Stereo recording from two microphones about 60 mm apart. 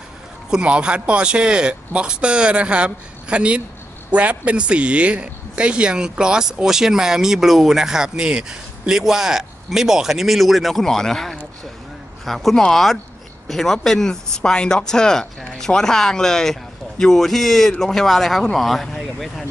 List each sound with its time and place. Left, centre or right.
0.5 s speech: centre